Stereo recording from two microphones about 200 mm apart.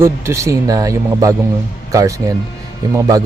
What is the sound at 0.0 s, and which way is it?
Speech, 15° right (ahead or behind).